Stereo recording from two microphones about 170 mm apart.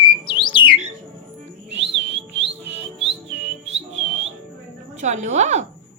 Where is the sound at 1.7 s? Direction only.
90° right.